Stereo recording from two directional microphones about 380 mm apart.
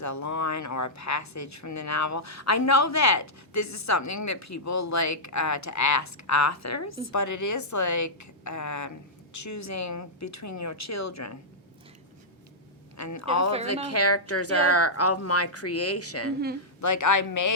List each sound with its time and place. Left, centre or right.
0.0 s speech: left
13.0 s speech: left
16.8 s speech: left